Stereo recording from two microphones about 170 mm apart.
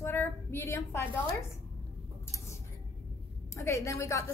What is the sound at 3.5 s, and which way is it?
Speech, 15° left (ahead or behind).